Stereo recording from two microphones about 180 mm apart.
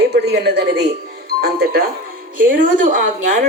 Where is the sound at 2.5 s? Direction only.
45° right (ahead or behind).